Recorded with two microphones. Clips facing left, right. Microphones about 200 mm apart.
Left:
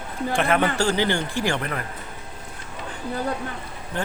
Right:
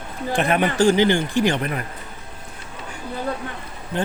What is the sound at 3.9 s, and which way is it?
Speech, 20° right (ahead or behind).